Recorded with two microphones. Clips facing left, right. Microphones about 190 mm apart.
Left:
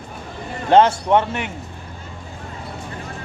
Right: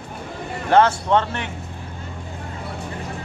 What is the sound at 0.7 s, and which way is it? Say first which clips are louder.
Speech: left 2 dB; 20° left (ahead or behind).